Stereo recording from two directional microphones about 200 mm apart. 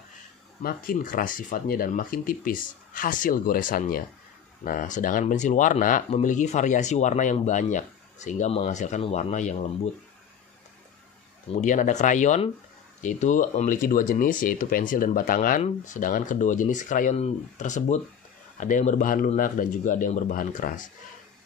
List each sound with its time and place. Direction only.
0.6 s speech: 45° left (ahead or behind)
11.5 s speech: 40° left (ahead or behind)